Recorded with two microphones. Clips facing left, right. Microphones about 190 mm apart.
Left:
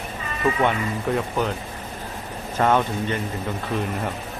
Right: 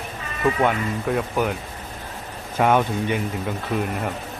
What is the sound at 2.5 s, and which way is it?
Speech, 10° right (ahead or behind).